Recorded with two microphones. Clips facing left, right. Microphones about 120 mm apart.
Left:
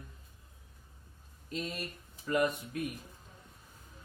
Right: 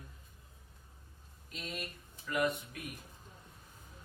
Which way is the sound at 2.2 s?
35° left (ahead or behind).